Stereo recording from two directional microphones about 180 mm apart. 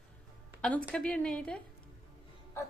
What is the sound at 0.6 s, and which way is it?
A woman's voice, 5° left (ahead or behind).